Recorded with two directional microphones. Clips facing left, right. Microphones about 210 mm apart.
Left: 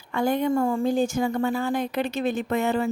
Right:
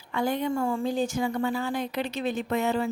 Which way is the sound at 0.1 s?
50° left (ahead or behind).